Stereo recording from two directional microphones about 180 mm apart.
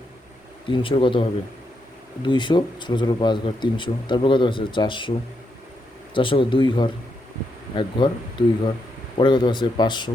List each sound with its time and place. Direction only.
0.7 s speech: 30° left (ahead or behind)
6.1 s speech: 30° left (ahead or behind)